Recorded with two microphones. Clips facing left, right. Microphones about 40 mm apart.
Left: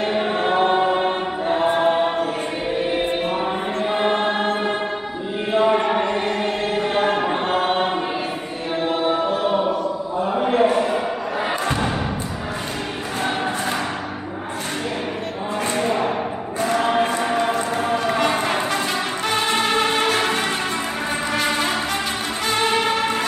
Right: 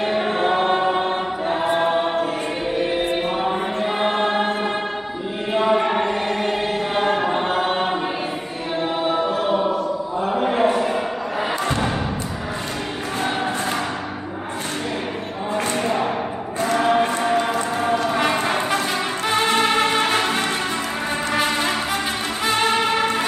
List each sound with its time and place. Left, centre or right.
0.1 s choir: centre
5.5 s chant: centre
6.8 s choir: centre
9.4 s music: centre
10.2 s chant: centre
11.6 s thump: centre
15.7 s a sound: centre
16.7 s choir: centre
17.2 s a sound: centre
19.4 s music: centre